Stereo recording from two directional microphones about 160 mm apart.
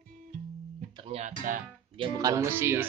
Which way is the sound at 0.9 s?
35° right (ahead or behind).